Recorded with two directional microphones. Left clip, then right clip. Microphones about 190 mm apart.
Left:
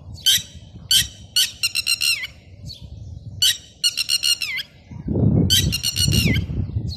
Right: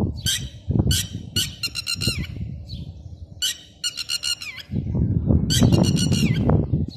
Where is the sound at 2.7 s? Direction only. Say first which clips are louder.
Left 4 dB; 60° left (ahead or behind).